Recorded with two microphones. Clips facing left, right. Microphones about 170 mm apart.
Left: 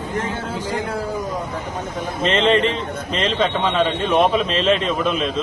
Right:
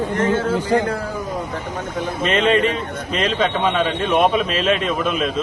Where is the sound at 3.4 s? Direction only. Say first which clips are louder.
Left 1 dB; 10° right (ahead or behind).